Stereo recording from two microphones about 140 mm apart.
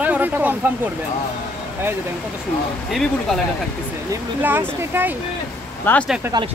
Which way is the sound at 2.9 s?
5° left (ahead or behind).